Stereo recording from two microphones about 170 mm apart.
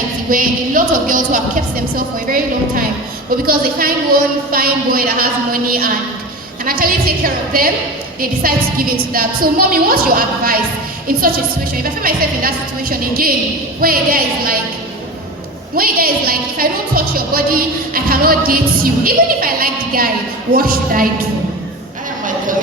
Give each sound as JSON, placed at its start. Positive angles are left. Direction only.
{"t": 0.3, "sound": "music", "side_deg": -55}
{"t": 3.4, "sound": "a woman's voice", "side_deg": -60}
{"t": 11.8, "sound": "a woman's voice", "side_deg": -60}
{"t": 15.7, "sound": "a woman's voice", "side_deg": -60}